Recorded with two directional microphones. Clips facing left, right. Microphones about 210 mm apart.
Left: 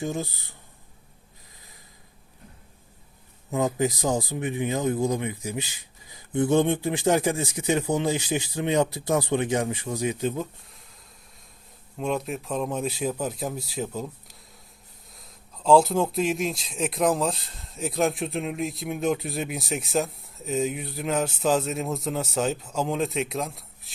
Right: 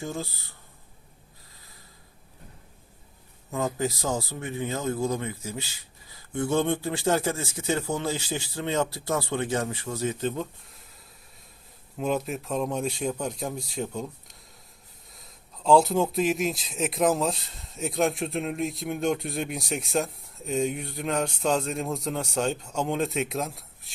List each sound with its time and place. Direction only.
0.0 s speech: 20° left (ahead or behind)
3.5 s speech: 20° left (ahead or behind); by 10.8 s centre (ahead or behind)
11.9 s speech: centre (ahead or behind)